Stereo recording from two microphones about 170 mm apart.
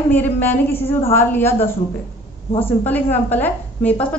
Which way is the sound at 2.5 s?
35° left (ahead or behind).